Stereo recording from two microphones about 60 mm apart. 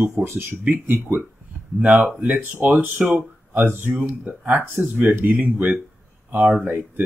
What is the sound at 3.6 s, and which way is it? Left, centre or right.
Speech, right.